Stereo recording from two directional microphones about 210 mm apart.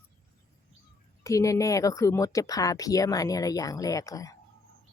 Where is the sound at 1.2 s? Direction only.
15° left (ahead or behind).